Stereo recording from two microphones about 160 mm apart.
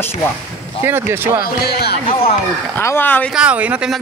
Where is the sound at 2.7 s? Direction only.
15° left (ahead or behind).